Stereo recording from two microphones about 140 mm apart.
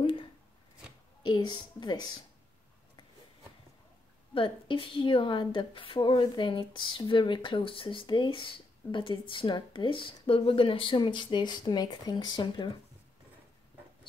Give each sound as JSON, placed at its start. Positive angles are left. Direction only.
{"t": 0.0, "sound": "a sound", "side_deg": 40}
{"t": 1.2, "sound": "a woman's voice", "side_deg": 30}
{"t": 4.3, "sound": "a woman's voice", "side_deg": 40}